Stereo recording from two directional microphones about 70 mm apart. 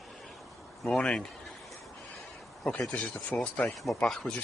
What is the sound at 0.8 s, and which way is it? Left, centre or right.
Speech, centre.